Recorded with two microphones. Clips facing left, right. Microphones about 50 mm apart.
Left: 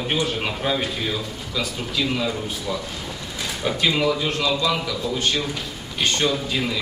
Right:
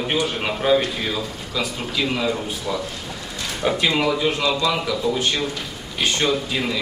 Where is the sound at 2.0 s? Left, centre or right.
Right.